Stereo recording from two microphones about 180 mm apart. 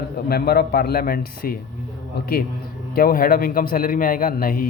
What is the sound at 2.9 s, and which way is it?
Speech, 55° left (ahead or behind).